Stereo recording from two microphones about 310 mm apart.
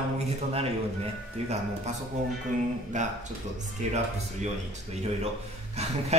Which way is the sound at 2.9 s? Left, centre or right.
Right.